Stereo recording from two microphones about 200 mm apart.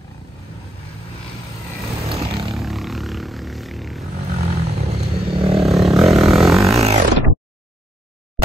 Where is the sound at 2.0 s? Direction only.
25° right (ahead or behind).